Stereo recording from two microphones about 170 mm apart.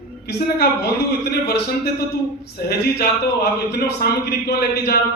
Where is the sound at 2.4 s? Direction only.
70° left (ahead or behind).